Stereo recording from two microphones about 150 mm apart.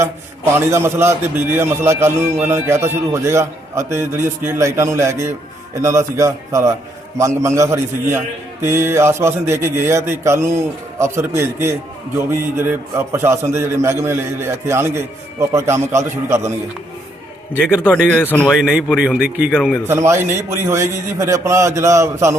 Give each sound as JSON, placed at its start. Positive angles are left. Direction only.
{"t": 0.5, "sound": "a man's voice", "side_deg": -15}
{"t": 17.8, "sound": "speech", "side_deg": 10}
{"t": 18.6, "sound": "speech", "side_deg": -5}
{"t": 19.5, "sound": "speech", "side_deg": 5}
{"t": 19.9, "sound": "a man's voice", "side_deg": -20}